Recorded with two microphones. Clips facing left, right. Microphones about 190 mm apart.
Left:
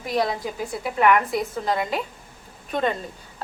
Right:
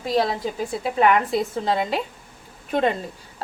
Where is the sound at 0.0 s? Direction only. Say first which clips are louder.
Right 2 dB; 25° right (ahead or behind).